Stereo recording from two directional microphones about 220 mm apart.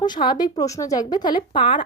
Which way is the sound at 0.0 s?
20° left (ahead or behind).